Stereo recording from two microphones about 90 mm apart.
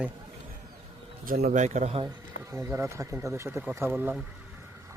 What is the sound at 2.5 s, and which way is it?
Speech, 30° right (ahead or behind).